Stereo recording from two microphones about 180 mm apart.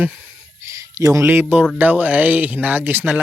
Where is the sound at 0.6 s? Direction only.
15° right (ahead or behind).